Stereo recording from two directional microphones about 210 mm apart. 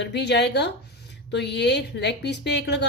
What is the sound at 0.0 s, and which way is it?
A woman's voice, 55° left (ahead or behind).